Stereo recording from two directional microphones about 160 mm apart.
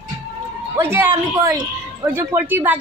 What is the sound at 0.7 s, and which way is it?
Speech, 15° right (ahead or behind).